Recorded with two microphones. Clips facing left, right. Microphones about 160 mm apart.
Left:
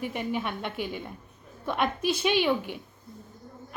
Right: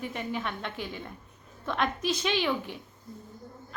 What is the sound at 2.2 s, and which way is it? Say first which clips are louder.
Speech: left 5 dB; 10° left (ahead or behind).